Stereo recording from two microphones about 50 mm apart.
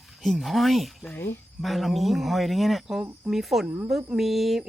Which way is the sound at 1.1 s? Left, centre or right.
Left.